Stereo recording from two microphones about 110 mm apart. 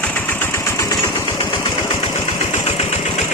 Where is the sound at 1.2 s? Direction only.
45° left (ahead or behind).